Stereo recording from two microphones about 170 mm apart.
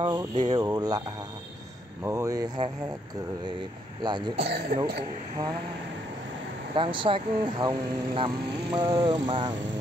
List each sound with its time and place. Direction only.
0.0 s speech: 25° right (ahead or behind)
2.0 s speech: 20° right (ahead or behind)
4.0 s speech: 25° right (ahead or behind)
4.4 s speech: 75° right (ahead or behind)
6.7 s speech: 30° right (ahead or behind)